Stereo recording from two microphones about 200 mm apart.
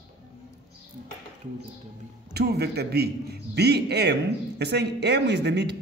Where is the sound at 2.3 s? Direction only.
55° right (ahead or behind).